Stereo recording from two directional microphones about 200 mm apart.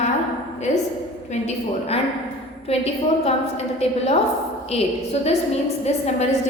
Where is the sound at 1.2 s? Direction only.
35° left (ahead or behind).